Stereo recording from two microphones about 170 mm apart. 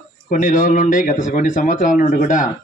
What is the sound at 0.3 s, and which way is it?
A man's voice, 50° left (ahead or behind).